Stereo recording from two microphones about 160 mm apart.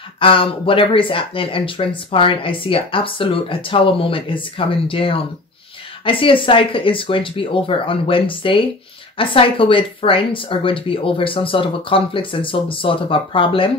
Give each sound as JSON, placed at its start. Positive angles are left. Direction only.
{"t": 0.2, "sound": "speech", "side_deg": 35}